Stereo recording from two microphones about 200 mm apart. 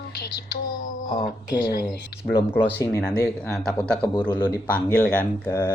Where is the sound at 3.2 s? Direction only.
Centre (ahead or behind).